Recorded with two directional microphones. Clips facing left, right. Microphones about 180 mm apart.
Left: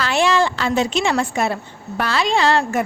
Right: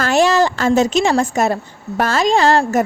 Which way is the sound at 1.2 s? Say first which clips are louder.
Right 4 dB; 40° right (ahead or behind).